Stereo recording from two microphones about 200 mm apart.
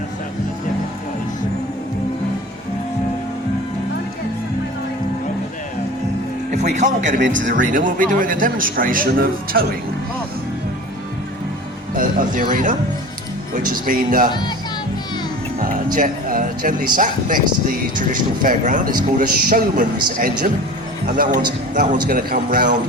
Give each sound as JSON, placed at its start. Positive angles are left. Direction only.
{"t": 6.5, "sound": "a man's voice", "side_deg": -35}
{"t": 7.2, "sound": "speech", "side_deg": -65}
{"t": 7.5, "sound": "a man's voice", "side_deg": -40}
{"t": 11.9, "sound": "speech", "side_deg": -40}
{"t": 13.8, "sound": "a man's voice", "side_deg": -45}
{"t": 14.3, "sound": "speech", "side_deg": 20}
{"t": 15.9, "sound": "a man's voice", "side_deg": -45}